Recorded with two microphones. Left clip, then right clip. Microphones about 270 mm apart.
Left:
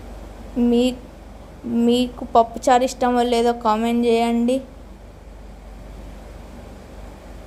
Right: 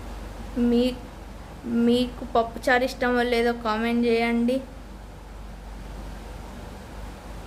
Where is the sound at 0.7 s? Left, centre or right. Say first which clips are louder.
Left 4 dB; centre.